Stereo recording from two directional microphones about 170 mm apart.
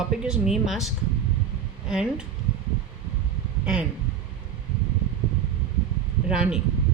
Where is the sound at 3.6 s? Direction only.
5° right (ahead or behind).